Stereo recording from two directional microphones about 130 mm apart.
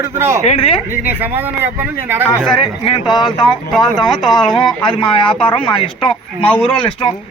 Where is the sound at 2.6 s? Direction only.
40° left (ahead or behind).